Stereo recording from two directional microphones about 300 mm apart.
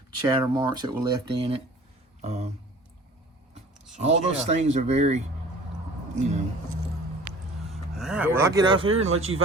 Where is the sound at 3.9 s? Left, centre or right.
Right.